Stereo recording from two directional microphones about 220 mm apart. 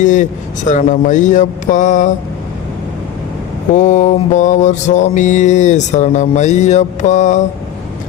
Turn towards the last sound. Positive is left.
turn(degrees=35)  # may be behind; listen again after turning